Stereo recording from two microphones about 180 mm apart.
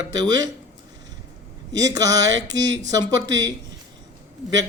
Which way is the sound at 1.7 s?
20° right (ahead or behind).